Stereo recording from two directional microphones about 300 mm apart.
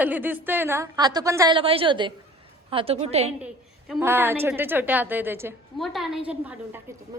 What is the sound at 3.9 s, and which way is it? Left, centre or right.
A woman's voice, centre.